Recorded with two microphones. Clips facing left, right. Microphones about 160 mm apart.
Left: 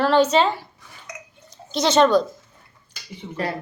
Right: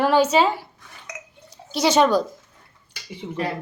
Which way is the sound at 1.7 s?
10° right (ahead or behind).